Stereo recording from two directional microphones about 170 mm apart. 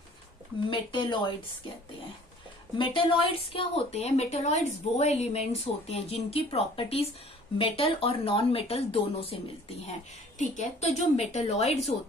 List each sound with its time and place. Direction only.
0.7 s speech: 25° left (ahead or behind)
2.8 s a woman's voice: 30° left (ahead or behind)
9.8 s a woman's voice: 45° left (ahead or behind)